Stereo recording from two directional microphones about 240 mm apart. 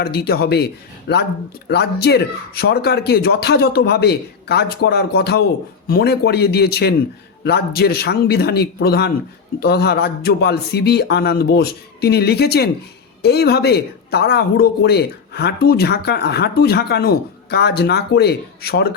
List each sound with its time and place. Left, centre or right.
0.0 s a man's voice: left